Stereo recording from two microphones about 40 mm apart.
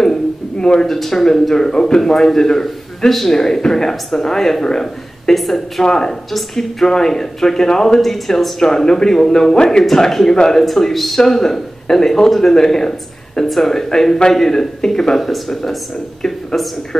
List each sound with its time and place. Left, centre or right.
0.0 s speech: centre